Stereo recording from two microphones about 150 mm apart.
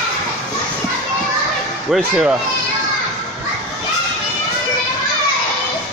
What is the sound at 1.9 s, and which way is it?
Speech, 5° right (ahead or behind).